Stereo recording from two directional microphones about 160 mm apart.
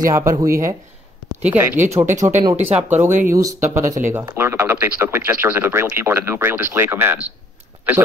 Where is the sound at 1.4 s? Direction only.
15° right (ahead or behind).